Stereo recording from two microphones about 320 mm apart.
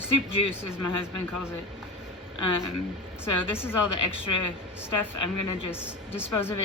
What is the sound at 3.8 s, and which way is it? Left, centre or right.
Speech, left.